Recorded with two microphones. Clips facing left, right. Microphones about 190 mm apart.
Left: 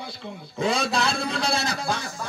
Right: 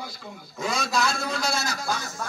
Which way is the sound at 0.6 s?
30° left (ahead or behind).